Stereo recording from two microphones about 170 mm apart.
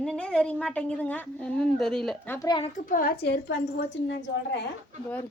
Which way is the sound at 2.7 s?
55° left (ahead or behind).